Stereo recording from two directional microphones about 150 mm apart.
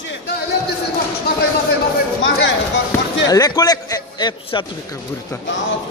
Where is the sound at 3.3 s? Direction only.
25° left (ahead or behind).